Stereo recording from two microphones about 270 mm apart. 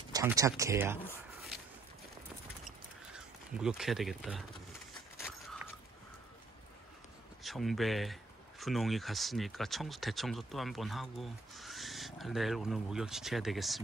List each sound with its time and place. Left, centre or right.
0.1 s speech: centre
3.5 s speech: centre
7.4 s speech: centre